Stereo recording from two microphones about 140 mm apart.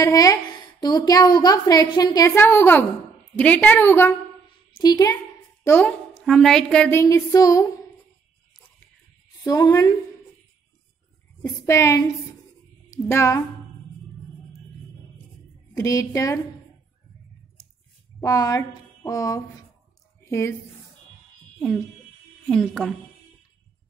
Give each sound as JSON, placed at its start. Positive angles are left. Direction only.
{"t": 0.0, "sound": "a woman's voice", "side_deg": 25}
{"t": 2.3, "sound": "a woman's voice", "side_deg": 15}
{"t": 4.7, "sound": "a woman's voice", "side_deg": 30}
{"t": 6.2, "sound": "a woman's voice", "side_deg": 5}
{"t": 6.9, "sound": "a woman's voice", "side_deg": 20}
{"t": 9.4, "sound": "a woman's voice", "side_deg": 25}
{"t": 11.4, "sound": "a woman's voice", "side_deg": 20}
{"t": 15.7, "sound": "a woman's voice", "side_deg": 25}
{"t": 18.2, "sound": "a woman's voice", "side_deg": 25}
{"t": 21.5, "sound": "a woman's voice", "side_deg": 0}